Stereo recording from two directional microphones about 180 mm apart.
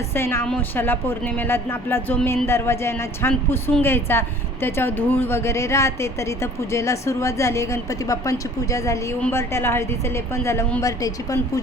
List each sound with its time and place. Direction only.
0.1 s a woman's voice: 15° left (ahead or behind)